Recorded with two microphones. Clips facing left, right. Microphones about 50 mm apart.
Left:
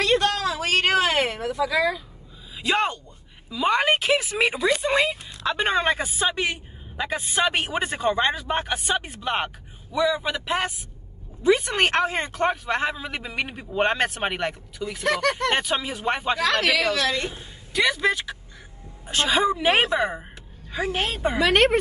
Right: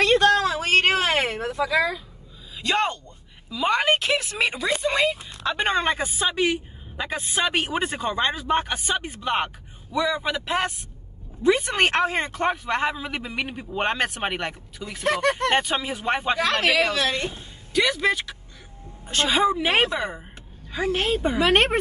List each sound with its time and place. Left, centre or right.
0.0 s a sound: right
2.5 s speech: centre
15.0 s speech: right
15.5 s speech: centre
16.3 s speech: right
17.7 s speech: centre